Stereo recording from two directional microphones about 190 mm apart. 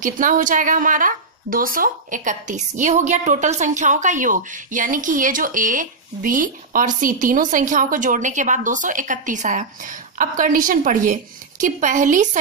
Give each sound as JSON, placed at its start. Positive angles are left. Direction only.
{"t": 0.0, "sound": "a woman's voice", "side_deg": -45}